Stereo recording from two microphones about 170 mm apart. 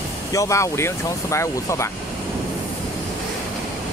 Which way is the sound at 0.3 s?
20° left (ahead or behind).